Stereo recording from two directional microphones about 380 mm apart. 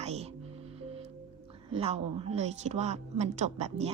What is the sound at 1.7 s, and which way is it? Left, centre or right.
A woman's voice, centre.